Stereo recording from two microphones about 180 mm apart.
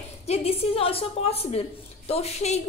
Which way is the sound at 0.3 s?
35° left (ahead or behind).